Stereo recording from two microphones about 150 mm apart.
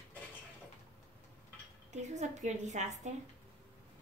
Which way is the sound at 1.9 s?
50° right (ahead or behind).